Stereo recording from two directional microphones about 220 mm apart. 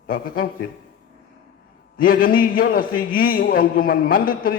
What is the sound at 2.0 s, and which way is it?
A man's voice, 40° left (ahead or behind).